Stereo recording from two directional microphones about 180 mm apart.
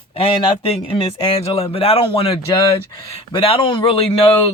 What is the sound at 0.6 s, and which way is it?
Speech, 30° left (ahead or behind).